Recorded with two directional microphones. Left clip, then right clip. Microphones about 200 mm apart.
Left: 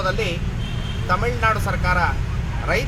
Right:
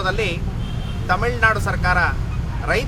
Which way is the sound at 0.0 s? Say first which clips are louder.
Right 1 dB; centre (ahead or behind).